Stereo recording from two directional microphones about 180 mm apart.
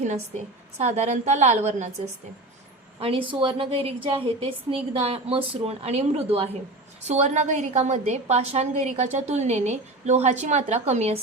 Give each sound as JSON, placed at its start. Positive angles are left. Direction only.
{"t": 0.0, "sound": "a woman's voice", "side_deg": -40}
{"t": 3.0, "sound": "a woman's voice", "side_deg": -30}